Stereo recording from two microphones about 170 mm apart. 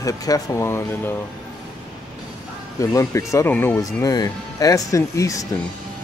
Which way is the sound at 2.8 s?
20° left (ahead or behind).